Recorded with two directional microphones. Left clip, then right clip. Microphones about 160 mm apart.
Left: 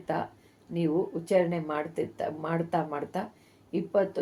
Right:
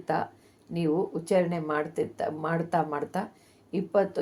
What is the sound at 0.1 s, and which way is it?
Speech, 25° right (ahead or behind).